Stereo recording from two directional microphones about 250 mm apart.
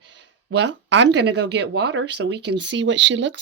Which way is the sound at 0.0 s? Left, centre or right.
Right.